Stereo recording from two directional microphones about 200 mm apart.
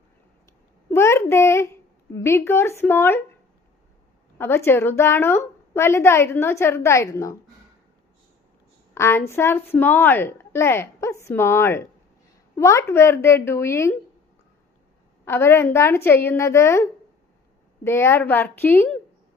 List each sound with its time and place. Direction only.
0.9 s a child's voice: 15° left (ahead or behind)
4.4 s a woman's voice: 10° left (ahead or behind)
9.0 s a woman's voice: 15° left (ahead or behind)
15.2 s a woman's voice: 10° left (ahead or behind)